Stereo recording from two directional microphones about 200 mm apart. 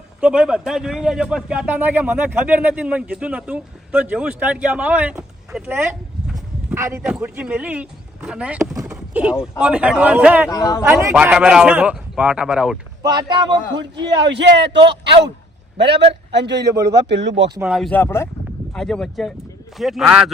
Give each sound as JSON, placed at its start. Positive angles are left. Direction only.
{"t": 0.2, "sound": "a man's voice", "side_deg": -5}
{"t": 6.7, "sound": "a man's voice", "side_deg": -15}
{"t": 8.8, "sound": "boat", "side_deg": -5}
{"t": 9.4, "sound": "a man's voice", "side_deg": -5}
{"t": 10.5, "sound": "speech", "side_deg": 15}
{"t": 10.8, "sound": "a man's voice", "side_deg": -10}
{"t": 13.0, "sound": "speech", "side_deg": -20}
{"t": 14.2, "sound": "a man's voice", "side_deg": -60}
{"t": 15.8, "sound": "a man's voice", "side_deg": -60}
{"t": 17.6, "sound": "a man's voice", "side_deg": -5}